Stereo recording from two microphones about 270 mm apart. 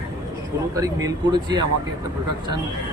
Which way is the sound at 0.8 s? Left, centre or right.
Centre.